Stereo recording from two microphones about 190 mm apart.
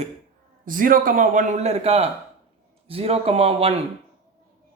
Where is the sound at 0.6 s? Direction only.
45° right (ahead or behind).